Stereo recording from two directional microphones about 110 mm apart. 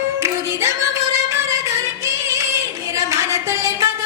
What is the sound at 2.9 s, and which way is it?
Music, 30° right (ahead or behind).